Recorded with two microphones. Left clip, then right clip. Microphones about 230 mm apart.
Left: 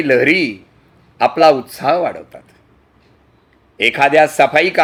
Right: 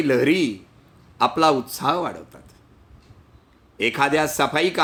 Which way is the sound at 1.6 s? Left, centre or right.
Right.